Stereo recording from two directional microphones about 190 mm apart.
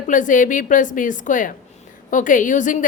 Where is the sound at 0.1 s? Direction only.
45° left (ahead or behind).